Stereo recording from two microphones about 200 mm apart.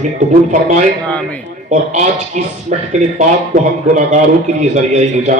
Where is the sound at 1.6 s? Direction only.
35° right (ahead or behind).